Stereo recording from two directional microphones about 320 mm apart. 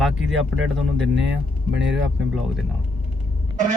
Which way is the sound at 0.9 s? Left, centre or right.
Right.